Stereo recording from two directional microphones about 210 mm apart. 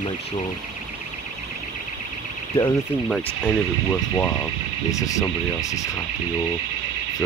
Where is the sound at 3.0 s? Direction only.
5° left (ahead or behind).